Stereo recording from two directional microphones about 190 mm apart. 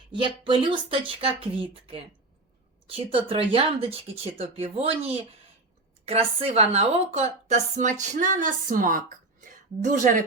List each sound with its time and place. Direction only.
0.1 s a woman's voice: 25° right (ahead or behind); by 10.2 s 45° right (ahead or behind)